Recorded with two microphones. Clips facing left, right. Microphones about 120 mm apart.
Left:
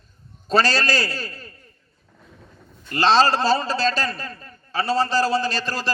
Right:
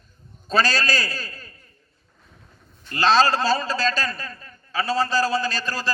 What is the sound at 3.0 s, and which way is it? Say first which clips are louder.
A man's voice: left 1 dB; 30° left (ahead or behind).